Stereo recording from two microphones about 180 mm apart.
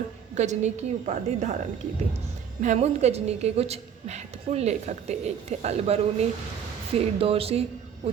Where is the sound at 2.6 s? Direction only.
40° right (ahead or behind).